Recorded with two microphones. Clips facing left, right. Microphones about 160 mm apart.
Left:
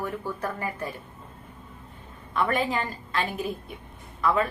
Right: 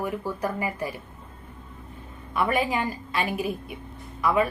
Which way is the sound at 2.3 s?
10° right (ahead or behind).